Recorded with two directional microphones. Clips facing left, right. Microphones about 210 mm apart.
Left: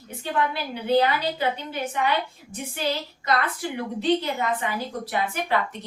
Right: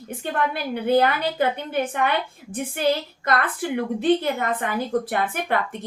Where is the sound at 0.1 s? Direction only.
55° right (ahead or behind).